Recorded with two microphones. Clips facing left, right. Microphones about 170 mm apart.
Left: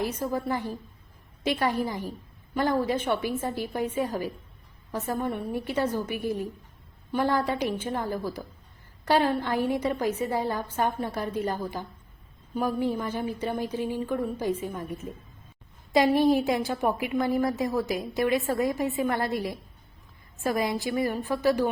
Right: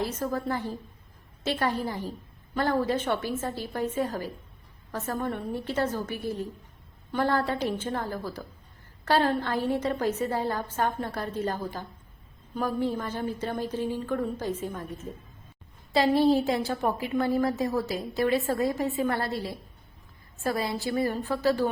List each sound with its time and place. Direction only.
0.0 s a woman's voice: 10° left (ahead or behind)